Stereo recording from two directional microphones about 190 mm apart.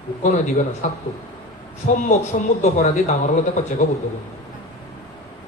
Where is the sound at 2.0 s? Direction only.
40° left (ahead or behind).